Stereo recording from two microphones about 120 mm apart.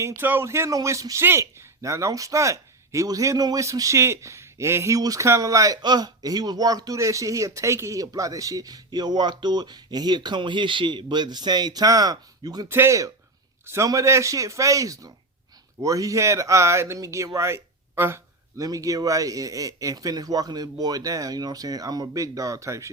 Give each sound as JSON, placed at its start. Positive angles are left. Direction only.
{"t": 0.0, "sound": "a man's voice", "side_deg": -20}
{"t": 12.6, "sound": "a man's voice", "side_deg": -20}